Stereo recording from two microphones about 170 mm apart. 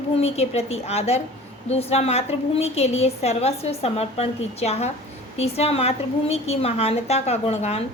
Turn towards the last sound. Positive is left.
turn(degrees=40)  # may be behind; listen again after turning